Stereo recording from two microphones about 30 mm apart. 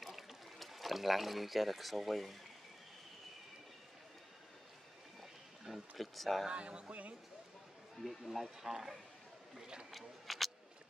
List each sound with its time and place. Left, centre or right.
0.0 s a sound: centre
5.7 s speech: centre
6.5 s speech: right
8.0 s speech: centre
8.3 s speech: centre
9.8 s single-lens reflex camera: centre